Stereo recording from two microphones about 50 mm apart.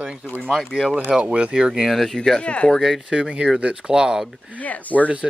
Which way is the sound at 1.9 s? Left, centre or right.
Centre.